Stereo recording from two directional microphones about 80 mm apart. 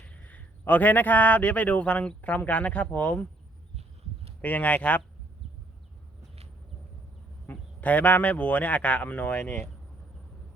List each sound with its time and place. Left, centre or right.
0.0 s speech: centre
4.4 s speech: centre
7.4 s a man's voice: centre